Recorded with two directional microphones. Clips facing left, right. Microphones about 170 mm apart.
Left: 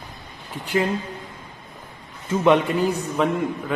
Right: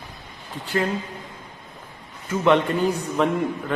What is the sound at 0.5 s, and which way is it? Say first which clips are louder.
Speech: left 1 dB; 20° left (ahead or behind).